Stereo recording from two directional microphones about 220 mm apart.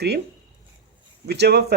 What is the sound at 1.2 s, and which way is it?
Speech, 50° right (ahead or behind).